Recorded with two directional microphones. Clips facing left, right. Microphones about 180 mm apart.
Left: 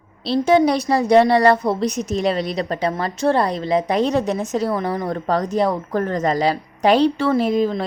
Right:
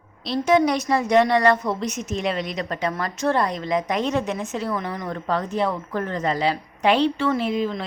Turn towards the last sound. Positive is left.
turn(degrees=40)  # may be behind; listen again after turning